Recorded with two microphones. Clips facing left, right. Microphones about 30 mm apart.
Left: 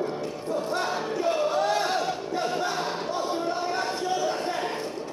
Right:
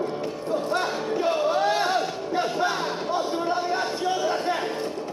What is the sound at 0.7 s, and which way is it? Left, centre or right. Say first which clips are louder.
Crowd: right 2 dB; right.